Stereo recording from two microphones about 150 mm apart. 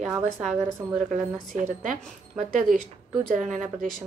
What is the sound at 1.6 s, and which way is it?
A woman's voice, 55° right (ahead or behind).